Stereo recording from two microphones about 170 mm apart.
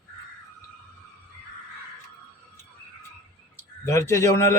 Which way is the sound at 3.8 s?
15° left (ahead or behind).